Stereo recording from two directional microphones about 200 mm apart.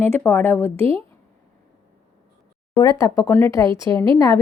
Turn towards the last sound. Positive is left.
turn(degrees=15)  # may be behind; listen again after turning